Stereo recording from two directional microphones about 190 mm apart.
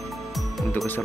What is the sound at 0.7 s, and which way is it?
Music, 10° left (ahead or behind).